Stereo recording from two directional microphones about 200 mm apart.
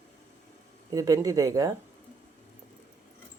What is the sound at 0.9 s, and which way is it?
Speech, 15° right (ahead or behind).